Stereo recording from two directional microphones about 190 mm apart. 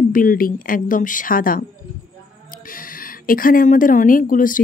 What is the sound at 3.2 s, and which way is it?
Speech, 50° left (ahead or behind).